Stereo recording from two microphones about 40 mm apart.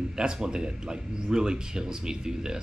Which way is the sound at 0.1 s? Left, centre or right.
Centre.